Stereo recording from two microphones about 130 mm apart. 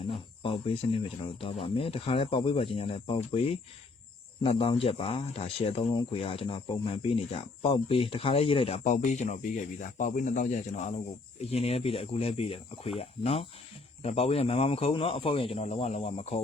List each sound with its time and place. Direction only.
0.4 s speech: 45° left (ahead or behind)
8.8 s speech: 70° left (ahead or behind); by 16.4 s 50° left (ahead or behind)